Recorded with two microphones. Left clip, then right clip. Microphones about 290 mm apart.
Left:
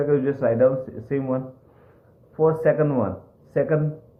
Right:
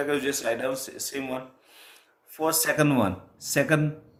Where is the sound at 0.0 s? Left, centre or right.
Right.